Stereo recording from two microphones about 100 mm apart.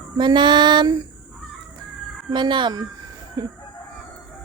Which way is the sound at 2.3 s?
50° right (ahead or behind).